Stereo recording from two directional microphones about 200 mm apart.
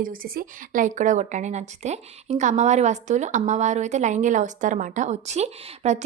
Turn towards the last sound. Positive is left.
turn(degrees=-35)  # may be behind; listen again after turning